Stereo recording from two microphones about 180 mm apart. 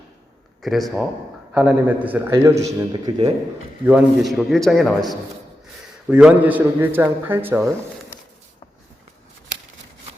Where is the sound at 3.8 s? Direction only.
5° right (ahead or behind).